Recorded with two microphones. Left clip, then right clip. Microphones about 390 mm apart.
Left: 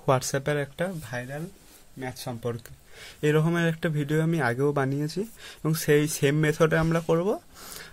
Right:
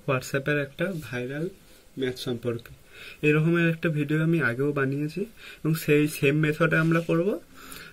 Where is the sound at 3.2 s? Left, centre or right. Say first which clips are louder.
Right 1 dB; centre.